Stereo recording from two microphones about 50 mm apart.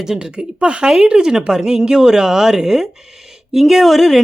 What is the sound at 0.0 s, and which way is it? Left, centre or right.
Speech, centre.